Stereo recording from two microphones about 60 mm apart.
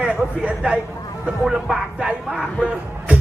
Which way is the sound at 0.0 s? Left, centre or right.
Centre.